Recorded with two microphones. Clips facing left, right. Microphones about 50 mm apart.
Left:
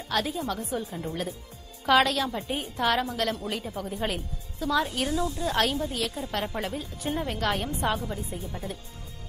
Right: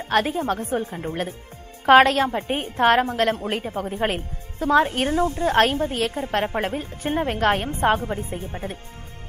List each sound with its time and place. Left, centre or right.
0.0 s a woman's voice: right